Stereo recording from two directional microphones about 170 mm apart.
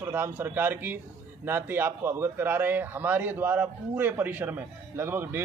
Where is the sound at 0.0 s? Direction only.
15° right (ahead or behind).